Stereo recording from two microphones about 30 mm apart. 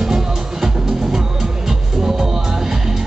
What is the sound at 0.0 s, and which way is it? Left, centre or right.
Music, centre.